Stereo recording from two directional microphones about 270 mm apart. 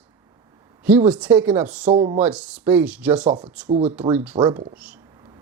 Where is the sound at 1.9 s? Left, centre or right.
Right.